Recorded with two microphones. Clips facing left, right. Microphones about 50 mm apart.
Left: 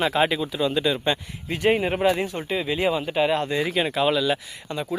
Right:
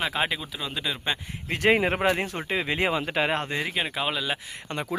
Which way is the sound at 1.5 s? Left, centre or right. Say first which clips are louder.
Left 1 dB; right.